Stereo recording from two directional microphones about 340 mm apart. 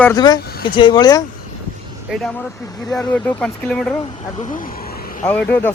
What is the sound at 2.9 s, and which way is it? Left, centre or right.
Speech, centre.